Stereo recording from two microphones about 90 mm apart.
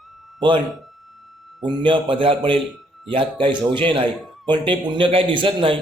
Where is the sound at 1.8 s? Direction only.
70° right (ahead or behind).